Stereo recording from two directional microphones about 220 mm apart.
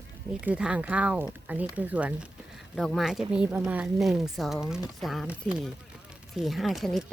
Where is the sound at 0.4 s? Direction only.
5° right (ahead or behind).